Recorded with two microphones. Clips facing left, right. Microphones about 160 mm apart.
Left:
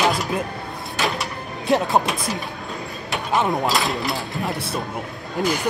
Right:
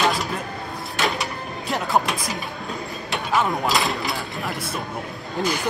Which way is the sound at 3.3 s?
20° left (ahead or behind).